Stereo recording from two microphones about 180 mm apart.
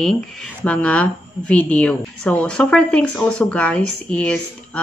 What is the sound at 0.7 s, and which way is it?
A woman's voice, 5° left (ahead or behind).